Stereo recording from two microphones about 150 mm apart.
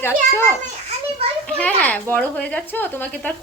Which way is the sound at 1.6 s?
10° left (ahead or behind).